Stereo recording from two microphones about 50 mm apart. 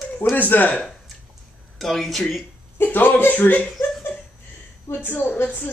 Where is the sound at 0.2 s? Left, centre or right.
Left.